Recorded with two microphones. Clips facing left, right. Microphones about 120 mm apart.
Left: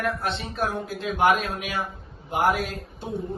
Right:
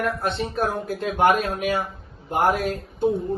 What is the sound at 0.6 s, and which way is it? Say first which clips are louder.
Speech: right 3 dB; 55° right (ahead or behind).